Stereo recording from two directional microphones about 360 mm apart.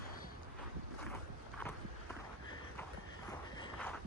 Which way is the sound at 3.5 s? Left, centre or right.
Centre.